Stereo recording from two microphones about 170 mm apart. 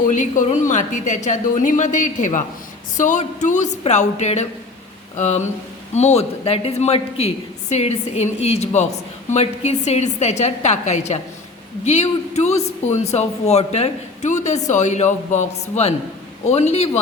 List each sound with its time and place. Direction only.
0.0 s a woman's voice: 50° left (ahead or behind)